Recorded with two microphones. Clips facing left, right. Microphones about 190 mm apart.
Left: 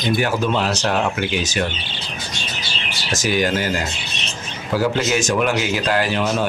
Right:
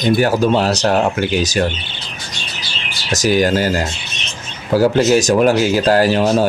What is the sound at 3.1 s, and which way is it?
Speech, 40° right (ahead or behind).